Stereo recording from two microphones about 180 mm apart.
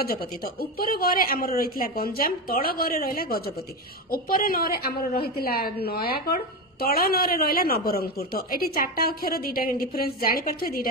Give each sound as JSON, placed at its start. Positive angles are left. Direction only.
{"t": 0.0, "sound": "a woman's voice", "side_deg": 55}